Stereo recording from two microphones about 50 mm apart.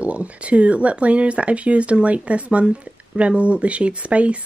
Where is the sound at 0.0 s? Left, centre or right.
Right.